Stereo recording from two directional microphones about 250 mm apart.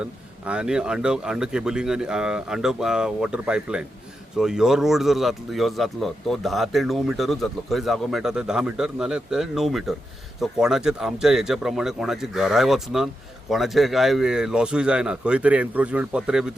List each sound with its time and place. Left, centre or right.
0.0 s speech: centre